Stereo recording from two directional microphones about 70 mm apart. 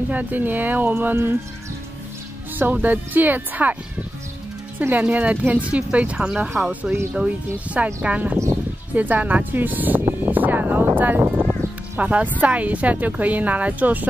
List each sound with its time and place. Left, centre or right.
0.1 s speech: right
2.6 s speech: right
4.8 s speech: right